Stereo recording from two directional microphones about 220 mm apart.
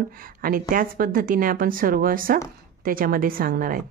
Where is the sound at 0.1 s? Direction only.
40° right (ahead or behind).